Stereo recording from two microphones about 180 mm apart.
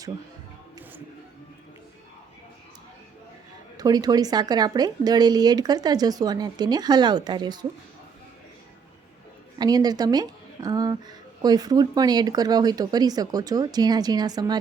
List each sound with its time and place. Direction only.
3.8 s speech: 20° right (ahead or behind)
9.6 s speech: 20° right (ahead or behind)